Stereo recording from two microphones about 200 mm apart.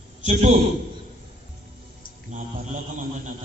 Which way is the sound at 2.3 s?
35° right (ahead or behind).